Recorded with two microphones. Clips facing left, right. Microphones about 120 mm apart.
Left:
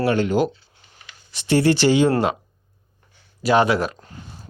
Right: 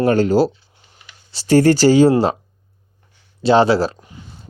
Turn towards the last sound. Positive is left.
turn(degrees=-30)  # may be behind; listen again after turning